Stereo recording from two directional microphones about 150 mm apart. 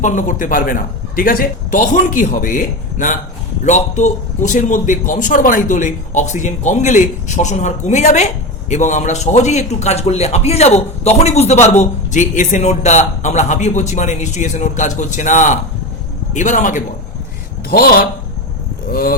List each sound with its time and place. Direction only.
0.0 s a man's voice: 60° left (ahead or behind)
17.7 s speech: 80° left